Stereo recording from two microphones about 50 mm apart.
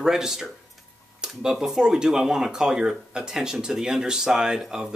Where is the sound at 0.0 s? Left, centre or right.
Centre.